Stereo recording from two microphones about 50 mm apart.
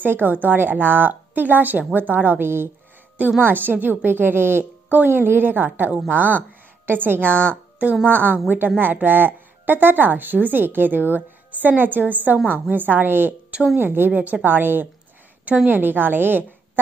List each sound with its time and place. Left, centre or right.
0.0 s a woman's voice: right
2.4 s a woman's voice: right
3.4 s a woman's voice: right